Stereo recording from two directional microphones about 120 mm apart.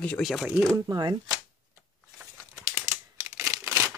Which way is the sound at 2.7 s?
20° right (ahead or behind).